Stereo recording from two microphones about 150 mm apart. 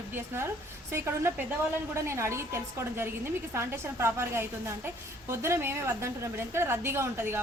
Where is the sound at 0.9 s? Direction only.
15° right (ahead or behind).